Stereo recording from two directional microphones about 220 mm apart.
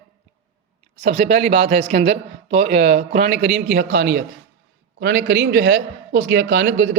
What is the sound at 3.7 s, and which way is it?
Speech, 55° right (ahead or behind).